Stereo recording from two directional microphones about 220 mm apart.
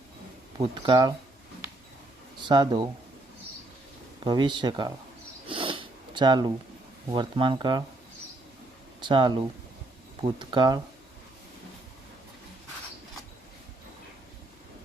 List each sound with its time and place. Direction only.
0.6 s speech: 25° right (ahead or behind)
2.5 s speech: 20° right (ahead or behind)
4.2 s speech: 20° right (ahead or behind)
5.5 s sniff: 25° right (ahead or behind)
7.1 s speech: 20° right (ahead or behind)
9.0 s speech: 20° right (ahead or behind)